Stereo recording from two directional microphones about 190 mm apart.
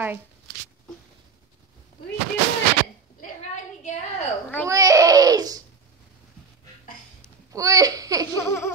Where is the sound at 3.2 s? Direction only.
40° left (ahead or behind).